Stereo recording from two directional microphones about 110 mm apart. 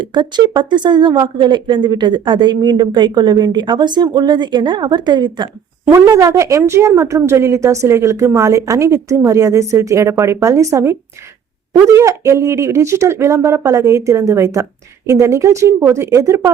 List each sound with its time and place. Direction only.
0.0 s a woman's voice: 45° right (ahead or behind)
5.9 s a woman's voice: 30° right (ahead or behind)